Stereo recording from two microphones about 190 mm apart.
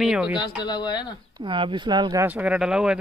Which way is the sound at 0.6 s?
20° left (ahead or behind).